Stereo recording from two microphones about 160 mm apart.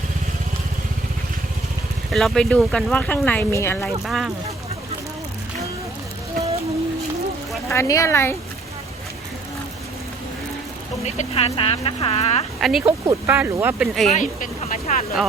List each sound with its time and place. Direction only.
2.1 s speech: centre (ahead or behind)
3.8 s speech: centre (ahead or behind)
7.7 s speech: 20° left (ahead or behind)
11.0 s speech: 40° left (ahead or behind)
12.5 s speech: centre (ahead or behind)
13.1 s speech: 15° right (ahead or behind)
13.8 s speech: centre (ahead or behind)
14.1 s speech: 50° left (ahead or behind)